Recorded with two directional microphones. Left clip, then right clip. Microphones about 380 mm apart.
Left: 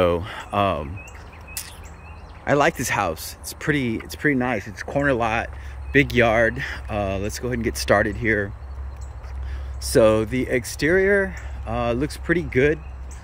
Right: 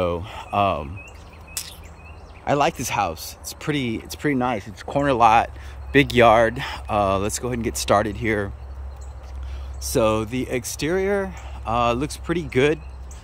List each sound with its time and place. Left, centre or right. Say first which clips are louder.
0.0 s speech: left 4 dB; centre
1.5 s a sound: right 2 dB; centre
2.4 s speech: left 1 dB; centre
9.8 s speech: left 4 dB; centre